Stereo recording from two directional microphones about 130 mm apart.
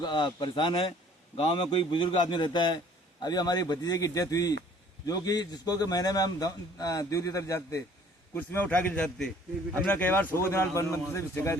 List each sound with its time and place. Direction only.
0.0 s a man's voice: 35° left (ahead or behind)
8.4 s a man's voice: 10° left (ahead or behind)